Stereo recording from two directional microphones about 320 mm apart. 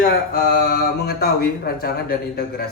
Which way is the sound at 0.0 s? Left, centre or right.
Left.